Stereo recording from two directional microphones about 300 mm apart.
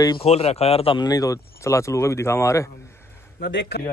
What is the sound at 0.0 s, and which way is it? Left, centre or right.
Speech, centre.